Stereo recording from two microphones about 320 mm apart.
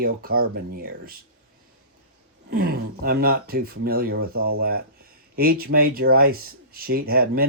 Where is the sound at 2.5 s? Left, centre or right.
Right.